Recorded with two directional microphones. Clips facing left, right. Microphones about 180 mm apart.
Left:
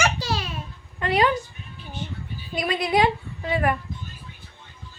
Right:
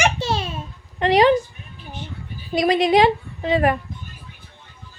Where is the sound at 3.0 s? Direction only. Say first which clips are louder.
Right 5 dB; 25° right (ahead or behind).